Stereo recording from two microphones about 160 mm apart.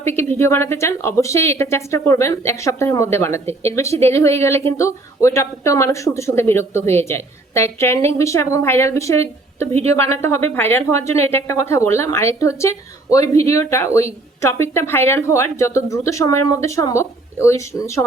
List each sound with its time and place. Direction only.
0.0 s speech: 15° left (ahead or behind)